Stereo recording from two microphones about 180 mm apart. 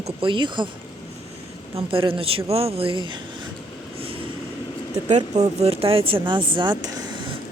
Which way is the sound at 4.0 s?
30° right (ahead or behind).